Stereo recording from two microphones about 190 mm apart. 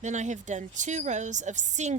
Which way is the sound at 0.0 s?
40° right (ahead or behind).